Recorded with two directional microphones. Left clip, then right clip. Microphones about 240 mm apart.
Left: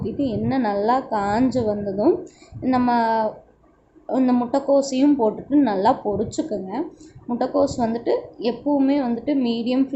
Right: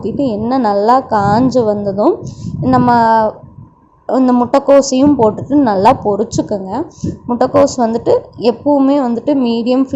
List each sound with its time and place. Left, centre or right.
0.0 s a woman's voice: right